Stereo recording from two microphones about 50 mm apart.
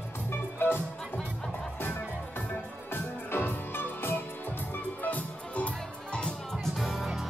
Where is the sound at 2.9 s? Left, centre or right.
Left.